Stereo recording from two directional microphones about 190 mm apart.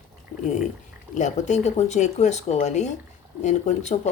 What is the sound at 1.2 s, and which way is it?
Speech, 40° left (ahead or behind).